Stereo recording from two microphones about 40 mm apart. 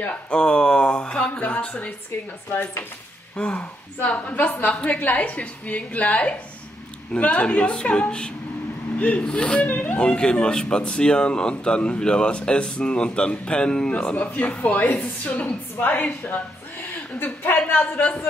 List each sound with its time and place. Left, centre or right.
0.3 s speech: left
3.3 s speech: left
4.2 s a woman's voice: left
4.7 s a woman's voice: left
8.9 s speech: left
9.2 s speech: left
9.7 s a woman's voice: left
9.9 s speech: left
14.1 s a woman's voice: left